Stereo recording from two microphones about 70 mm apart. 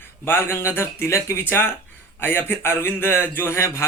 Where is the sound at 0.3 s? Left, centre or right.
Left.